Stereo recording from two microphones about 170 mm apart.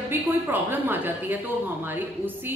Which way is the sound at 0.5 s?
10° right (ahead or behind).